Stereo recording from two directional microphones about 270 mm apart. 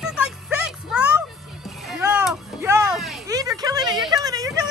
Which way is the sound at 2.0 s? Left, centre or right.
Centre.